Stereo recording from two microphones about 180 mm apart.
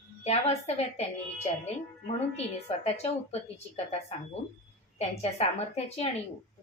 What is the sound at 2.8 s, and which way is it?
Speech, 35° left (ahead or behind).